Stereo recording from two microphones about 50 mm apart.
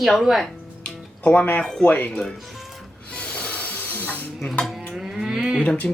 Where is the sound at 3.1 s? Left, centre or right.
Left.